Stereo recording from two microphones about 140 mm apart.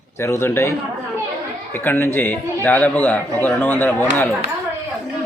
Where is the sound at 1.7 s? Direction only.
15° left (ahead or behind).